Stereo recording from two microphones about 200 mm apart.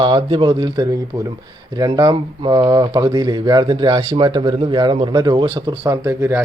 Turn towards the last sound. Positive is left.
turn(degrees=-15)  # may be behind; listen again after turning